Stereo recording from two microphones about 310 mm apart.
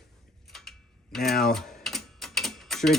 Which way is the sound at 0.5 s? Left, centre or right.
Centre.